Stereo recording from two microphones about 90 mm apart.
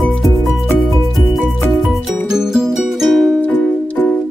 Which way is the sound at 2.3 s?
5° right (ahead or behind).